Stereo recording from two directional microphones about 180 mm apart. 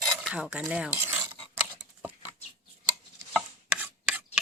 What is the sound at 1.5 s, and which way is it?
Patter, 10° right (ahead or behind).